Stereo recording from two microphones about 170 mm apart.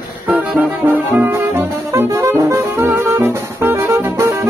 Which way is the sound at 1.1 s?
10° right (ahead or behind).